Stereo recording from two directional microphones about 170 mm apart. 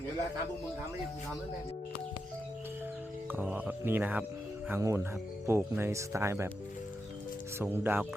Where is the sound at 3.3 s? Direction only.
10° right (ahead or behind).